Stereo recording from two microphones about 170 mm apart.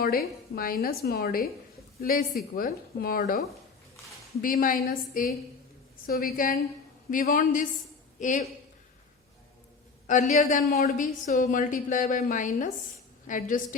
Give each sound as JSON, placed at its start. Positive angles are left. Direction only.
{"t": 0.0, "sound": "a woman's voice", "side_deg": 60}
{"t": 10.1, "sound": "a woman's voice", "side_deg": 45}